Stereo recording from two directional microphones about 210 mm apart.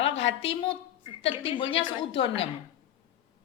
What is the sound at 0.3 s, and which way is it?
A woman's voice, 25° left (ahead or behind).